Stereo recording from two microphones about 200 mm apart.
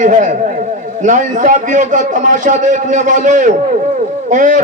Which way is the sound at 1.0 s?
40° right (ahead or behind).